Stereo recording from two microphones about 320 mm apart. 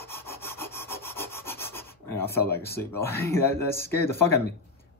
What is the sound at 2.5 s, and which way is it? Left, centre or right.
Speech, centre.